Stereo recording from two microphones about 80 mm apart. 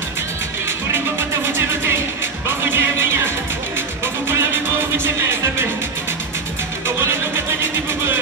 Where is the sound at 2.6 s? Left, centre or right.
Right.